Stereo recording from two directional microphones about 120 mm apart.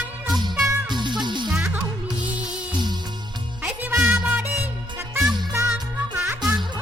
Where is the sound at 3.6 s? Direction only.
15° right (ahead or behind).